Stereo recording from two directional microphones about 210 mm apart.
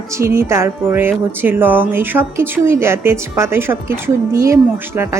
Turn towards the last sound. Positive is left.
turn(degrees=-15)  # may be behind; listen again after turning